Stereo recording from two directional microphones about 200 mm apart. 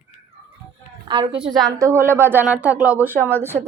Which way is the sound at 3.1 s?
10° left (ahead or behind).